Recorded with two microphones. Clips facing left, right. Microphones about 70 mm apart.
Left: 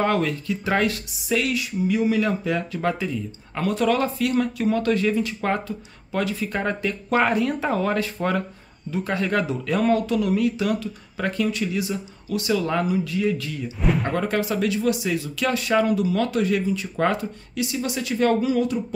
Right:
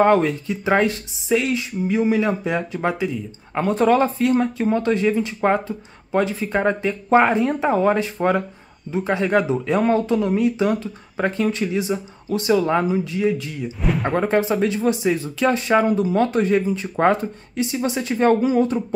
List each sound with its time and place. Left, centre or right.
0.0 s speech: right
3.5 s speech: right
13.7 s speech: centre
14.2 s speech: right